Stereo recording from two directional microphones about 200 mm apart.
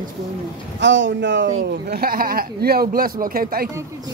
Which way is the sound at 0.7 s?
65° right (ahead or behind).